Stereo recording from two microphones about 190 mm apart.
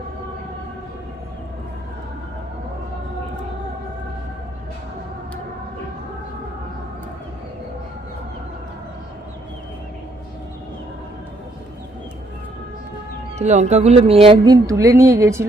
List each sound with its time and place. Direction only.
13.4 s speech: 35° right (ahead or behind); by 15.4 s 15° right (ahead or behind)